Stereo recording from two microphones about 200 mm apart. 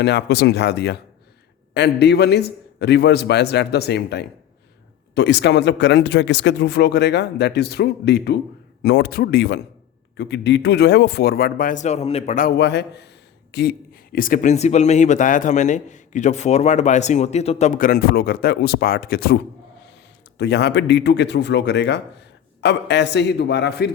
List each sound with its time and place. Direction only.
0.0 s speech: 55° left (ahead or behind); by 12.5 s 40° left (ahead or behind)
12.5 s speech: 60° left (ahead or behind)
20.4 s speech: 60° left (ahead or behind)